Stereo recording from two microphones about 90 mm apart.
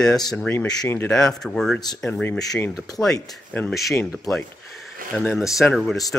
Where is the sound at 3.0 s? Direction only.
5° left (ahead or behind).